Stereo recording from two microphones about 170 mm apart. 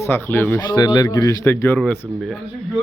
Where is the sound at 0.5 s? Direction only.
25° left (ahead or behind); by 2.0 s 5° left (ahead or behind).